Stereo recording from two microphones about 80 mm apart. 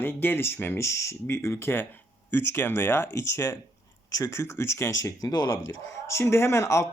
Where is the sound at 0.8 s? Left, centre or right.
Left.